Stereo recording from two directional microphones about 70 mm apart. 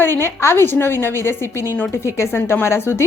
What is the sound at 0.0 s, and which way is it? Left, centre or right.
Speech, left.